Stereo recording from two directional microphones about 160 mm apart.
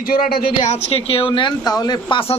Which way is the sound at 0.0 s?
65° left (ahead or behind).